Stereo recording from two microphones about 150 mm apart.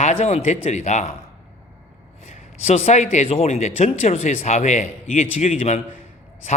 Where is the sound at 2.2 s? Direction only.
50° left (ahead or behind).